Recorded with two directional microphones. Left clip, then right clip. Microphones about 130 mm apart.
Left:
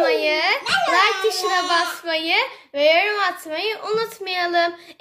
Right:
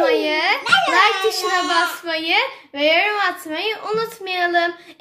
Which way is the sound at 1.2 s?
30° left (ahead or behind).